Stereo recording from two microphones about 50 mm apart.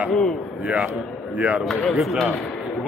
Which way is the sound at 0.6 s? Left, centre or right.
Centre.